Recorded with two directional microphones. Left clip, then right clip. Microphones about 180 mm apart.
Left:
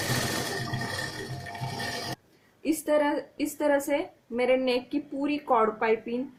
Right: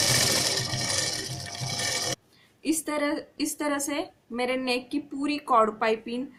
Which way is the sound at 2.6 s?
20° right (ahead or behind).